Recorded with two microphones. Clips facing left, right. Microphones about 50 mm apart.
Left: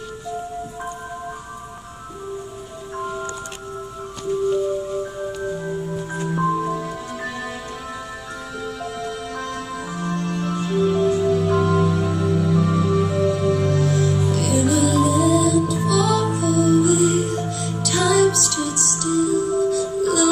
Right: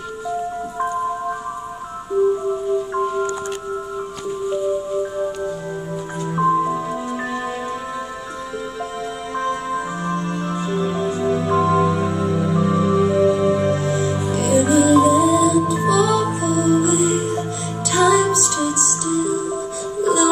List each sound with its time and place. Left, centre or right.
6.2 s music: centre
9.4 s music: right